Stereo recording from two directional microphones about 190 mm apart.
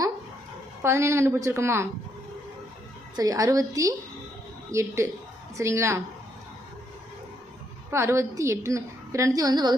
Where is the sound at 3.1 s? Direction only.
20° right (ahead or behind).